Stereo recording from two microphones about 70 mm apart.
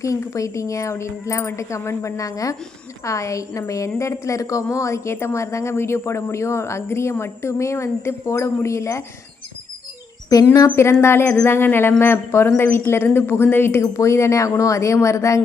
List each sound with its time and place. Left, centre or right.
0.0 s a woman's voice: left
10.3 s a woman's voice: left
11.0 s a woman's voice: left
13.8 s speech: left